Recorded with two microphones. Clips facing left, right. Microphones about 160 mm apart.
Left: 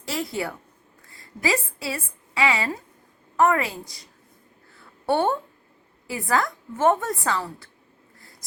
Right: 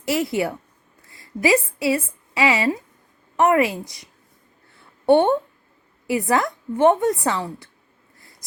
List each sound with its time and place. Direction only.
0.2 s a woman's voice: 25° right (ahead or behind)
5.0 s a woman's voice: 20° right (ahead or behind)